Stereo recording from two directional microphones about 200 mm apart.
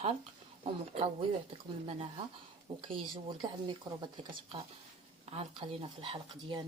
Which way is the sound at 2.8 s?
25° right (ahead or behind).